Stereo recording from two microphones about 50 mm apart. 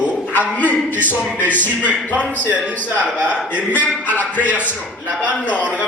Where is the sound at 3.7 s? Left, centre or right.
Left.